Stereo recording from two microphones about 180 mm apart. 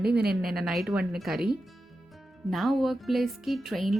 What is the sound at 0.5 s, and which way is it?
Speech, centre (ahead or behind).